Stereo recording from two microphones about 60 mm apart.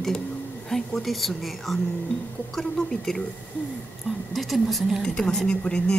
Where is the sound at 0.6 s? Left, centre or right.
Centre.